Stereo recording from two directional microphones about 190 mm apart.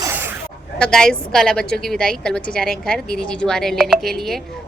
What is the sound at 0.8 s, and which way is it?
A woman's voice, 5° left (ahead or behind).